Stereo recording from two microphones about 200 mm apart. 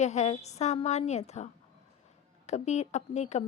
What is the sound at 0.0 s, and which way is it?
A woman's voice, 35° left (ahead or behind).